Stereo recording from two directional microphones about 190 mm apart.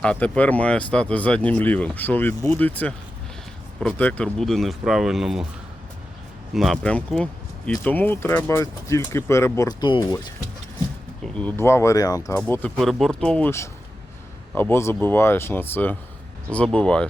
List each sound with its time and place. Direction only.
0.0 s speech: 5° left (ahead or behind)
6.5 s speech: centre (ahead or behind); by 10.2 s 20° left (ahead or behind)
11.3 s speech: 10° left (ahead or behind)
12.4 s speech: 5° left (ahead or behind)